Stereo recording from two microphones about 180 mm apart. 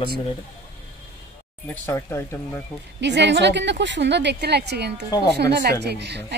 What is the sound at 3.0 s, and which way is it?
A woman's voice, 75° right (ahead or behind).